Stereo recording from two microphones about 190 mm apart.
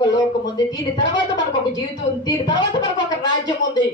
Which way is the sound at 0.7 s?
20° left (ahead or behind).